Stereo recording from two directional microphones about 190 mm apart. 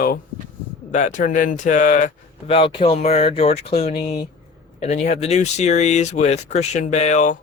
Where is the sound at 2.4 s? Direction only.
30° left (ahead or behind).